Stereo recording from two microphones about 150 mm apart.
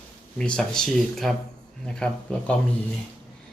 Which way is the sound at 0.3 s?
5° left (ahead or behind).